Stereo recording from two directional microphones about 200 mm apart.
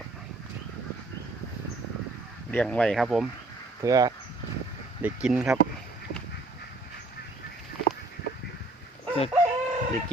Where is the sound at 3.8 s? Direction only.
20° right (ahead or behind).